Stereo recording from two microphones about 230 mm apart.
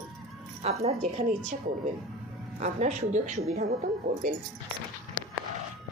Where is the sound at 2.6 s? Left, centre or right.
Right.